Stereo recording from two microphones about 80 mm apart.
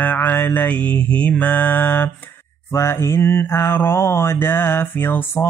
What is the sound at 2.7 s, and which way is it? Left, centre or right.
Mantra, left.